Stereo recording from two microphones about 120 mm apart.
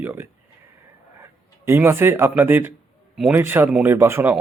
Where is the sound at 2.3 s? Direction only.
15° right (ahead or behind).